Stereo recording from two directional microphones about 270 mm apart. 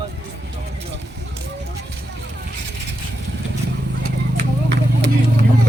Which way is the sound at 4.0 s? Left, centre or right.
Right.